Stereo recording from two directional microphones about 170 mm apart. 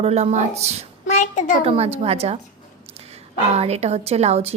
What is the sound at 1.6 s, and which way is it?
Speech, 35° right (ahead or behind).